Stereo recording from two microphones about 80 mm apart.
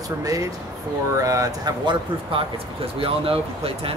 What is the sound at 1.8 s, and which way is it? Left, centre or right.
Speech, right.